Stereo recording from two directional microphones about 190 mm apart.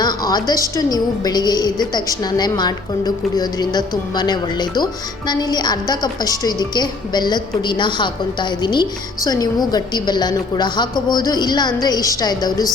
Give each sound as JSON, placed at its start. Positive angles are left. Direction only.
{"t": 0.0, "sound": "a woman's voice", "side_deg": 20}